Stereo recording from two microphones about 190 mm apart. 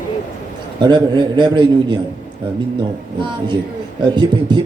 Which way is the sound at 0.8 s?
25° right (ahead or behind).